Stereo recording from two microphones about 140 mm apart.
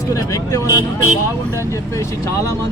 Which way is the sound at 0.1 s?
25° left (ahead or behind).